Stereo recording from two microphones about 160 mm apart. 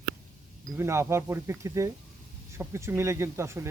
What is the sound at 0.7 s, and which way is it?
Speech, 15° right (ahead or behind).